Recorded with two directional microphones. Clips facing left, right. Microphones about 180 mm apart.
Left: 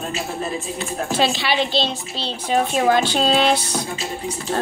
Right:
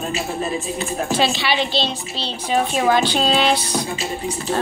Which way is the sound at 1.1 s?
45° left (ahead or behind).